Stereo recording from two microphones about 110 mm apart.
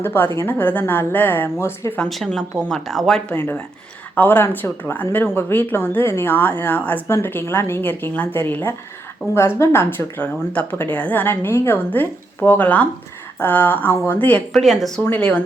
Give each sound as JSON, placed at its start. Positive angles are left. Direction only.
{"t": 0.0, "sound": "a woman's voice", "side_deg": 20}
{"t": 2.0, "sound": "a woman's voice", "side_deg": 0}
{"t": 3.3, "sound": "a woman's voice", "side_deg": 20}
{"t": 14.6, "sound": "speech", "side_deg": 0}
{"t": 15.0, "sound": "a woman's voice", "side_deg": 15}